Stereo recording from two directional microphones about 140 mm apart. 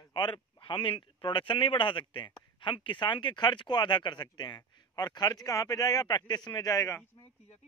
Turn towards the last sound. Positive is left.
turn(degrees=25)  # may be behind; listen again after turning